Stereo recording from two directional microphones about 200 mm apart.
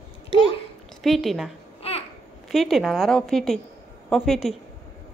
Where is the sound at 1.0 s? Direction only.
Centre (ahead or behind).